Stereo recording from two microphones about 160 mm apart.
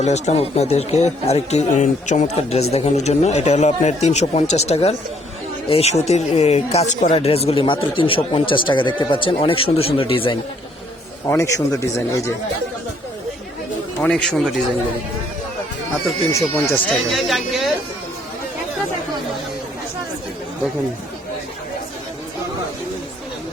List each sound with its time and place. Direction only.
0.0 s speech: 45° left (ahead or behind)
11.3 s speech: 15° left (ahead or behind)
14.0 s a man's voice: 5° left (ahead or behind)
16.3 s speech: 15° left (ahead or behind)
17.1 s a man's voice: centre (ahead or behind)